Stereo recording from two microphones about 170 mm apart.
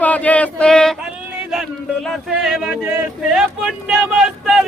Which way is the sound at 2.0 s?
Centre (ahead or behind).